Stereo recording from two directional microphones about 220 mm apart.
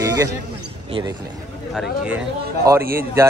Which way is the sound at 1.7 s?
5° right (ahead or behind).